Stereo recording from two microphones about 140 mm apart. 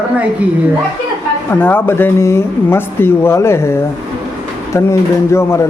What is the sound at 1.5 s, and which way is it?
Speech, 15° left (ahead or behind).